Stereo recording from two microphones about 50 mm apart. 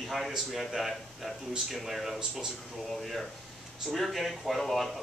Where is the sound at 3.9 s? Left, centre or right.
Centre.